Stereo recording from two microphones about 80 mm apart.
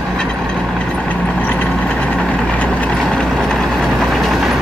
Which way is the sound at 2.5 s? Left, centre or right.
Centre.